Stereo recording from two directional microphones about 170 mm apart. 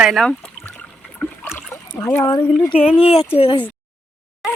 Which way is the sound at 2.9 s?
35° left (ahead or behind).